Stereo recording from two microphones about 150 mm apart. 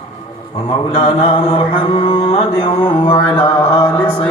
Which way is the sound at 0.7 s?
45° left (ahead or behind).